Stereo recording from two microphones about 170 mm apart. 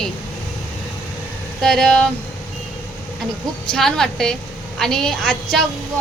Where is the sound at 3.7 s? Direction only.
5° left (ahead or behind).